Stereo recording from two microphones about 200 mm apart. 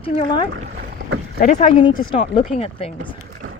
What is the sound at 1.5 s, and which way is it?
Speech, 25° left (ahead or behind).